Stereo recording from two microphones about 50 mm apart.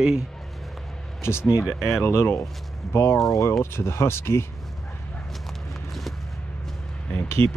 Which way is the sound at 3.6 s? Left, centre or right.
Left.